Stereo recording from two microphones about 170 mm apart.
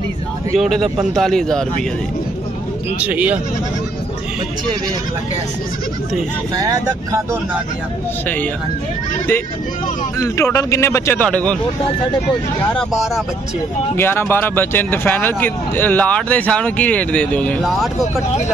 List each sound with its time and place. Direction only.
0.6 s a man's voice: centre (ahead or behind)
3.0 s speech: 10° right (ahead or behind)
6.5 s speech: 20° right (ahead or behind)
10.1 s speech: 15° left (ahead or behind)
12.7 s a man's voice: centre (ahead or behind)
13.9 s speech: 10° left (ahead or behind)